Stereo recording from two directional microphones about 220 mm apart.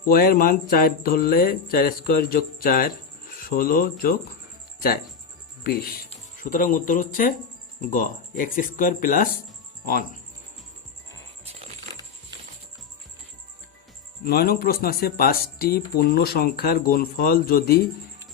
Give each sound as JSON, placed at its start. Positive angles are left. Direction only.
{"t": 0.0, "sound": "speech", "side_deg": 40}
{"t": 5.6, "sound": "speech", "side_deg": 45}
{"t": 14.3, "sound": "speech", "side_deg": 45}